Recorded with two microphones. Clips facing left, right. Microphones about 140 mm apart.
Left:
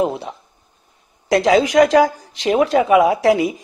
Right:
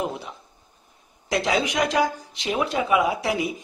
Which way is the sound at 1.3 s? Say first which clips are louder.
Left 10 dB; 40° left (ahead or behind).